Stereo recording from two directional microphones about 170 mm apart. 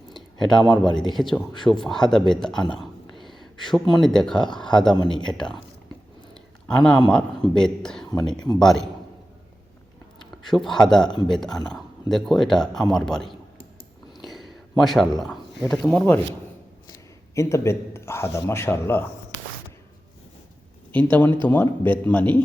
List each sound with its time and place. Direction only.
0.1 s a sound: centre (ahead or behind)
0.8 s a man's voice: centre (ahead or behind)
6.3 s a sound: 5° left (ahead or behind)
7.1 s speech: 5° left (ahead or behind)
10.4 s speech: centre (ahead or behind)
14.3 s a sound: centre (ahead or behind)
15.7 s speech: centre (ahead or behind)
17.3 s a man's voice: 15° left (ahead or behind)
20.9 s a man's voice: 10° left (ahead or behind)